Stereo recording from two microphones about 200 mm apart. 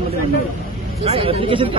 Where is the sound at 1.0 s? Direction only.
30° right (ahead or behind).